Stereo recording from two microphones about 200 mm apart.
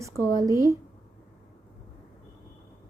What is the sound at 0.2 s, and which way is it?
Speech, 15° right (ahead or behind).